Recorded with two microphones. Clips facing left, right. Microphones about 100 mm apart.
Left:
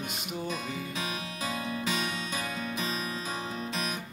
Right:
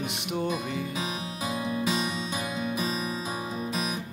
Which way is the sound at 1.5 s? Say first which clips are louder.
Right 4 dB; 15° right (ahead or behind).